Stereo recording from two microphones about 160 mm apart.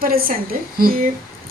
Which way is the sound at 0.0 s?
65° right (ahead or behind).